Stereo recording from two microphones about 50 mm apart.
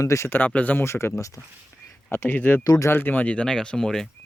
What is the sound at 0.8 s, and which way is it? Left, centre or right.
Speech, left.